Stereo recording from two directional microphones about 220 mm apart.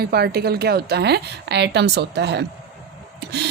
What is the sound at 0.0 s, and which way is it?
Speech, 45° right (ahead or behind).